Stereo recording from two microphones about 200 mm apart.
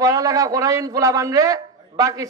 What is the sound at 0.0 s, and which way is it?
A man's voice, 15° right (ahead or behind).